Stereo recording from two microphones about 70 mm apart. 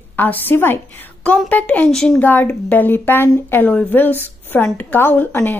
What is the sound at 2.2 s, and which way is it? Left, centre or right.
A woman's voice, left.